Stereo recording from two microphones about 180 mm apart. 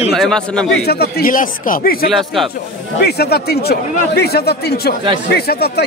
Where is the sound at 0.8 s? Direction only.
60° left (ahead or behind).